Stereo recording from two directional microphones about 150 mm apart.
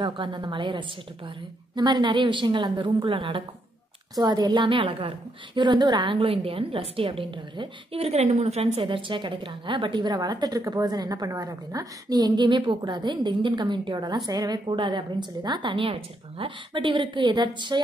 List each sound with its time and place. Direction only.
0.0 s a woman's voice: 30° right (ahead or behind)